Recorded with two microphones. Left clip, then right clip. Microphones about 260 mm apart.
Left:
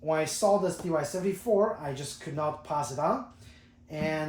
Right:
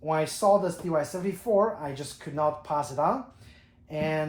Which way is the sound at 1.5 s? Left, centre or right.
Right.